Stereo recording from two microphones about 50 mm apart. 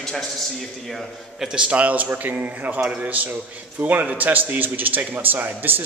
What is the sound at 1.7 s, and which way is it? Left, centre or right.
A man's voice, right.